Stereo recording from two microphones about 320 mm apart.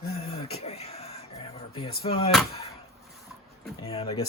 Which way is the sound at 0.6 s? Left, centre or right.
Centre.